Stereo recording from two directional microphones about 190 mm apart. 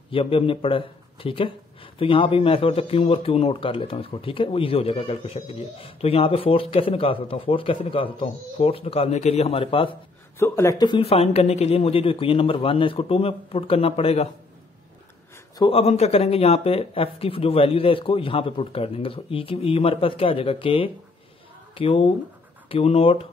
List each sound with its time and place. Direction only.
0.1 s speech: 30° left (ahead or behind)
10.4 s speech: 15° left (ahead or behind); by 14.3 s 30° left (ahead or behind)
15.5 s speech: 25° left (ahead or behind)